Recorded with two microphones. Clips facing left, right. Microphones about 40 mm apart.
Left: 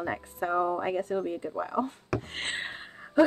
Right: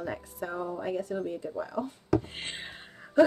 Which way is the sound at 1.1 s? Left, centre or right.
Left.